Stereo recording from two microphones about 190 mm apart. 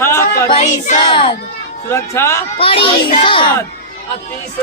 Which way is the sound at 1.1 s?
30° left (ahead or behind).